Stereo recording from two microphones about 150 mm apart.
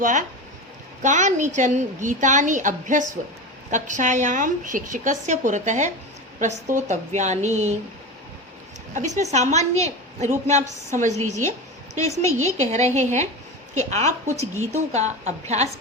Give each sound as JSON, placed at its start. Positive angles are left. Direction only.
{"t": 0.0, "sound": "a woman's voice", "side_deg": -55}
{"t": 9.0, "sound": "a woman's voice", "side_deg": -55}
{"t": 12.0, "sound": "a woman's voice", "side_deg": 20}
{"t": 12.5, "sound": "a woman's voice", "side_deg": -50}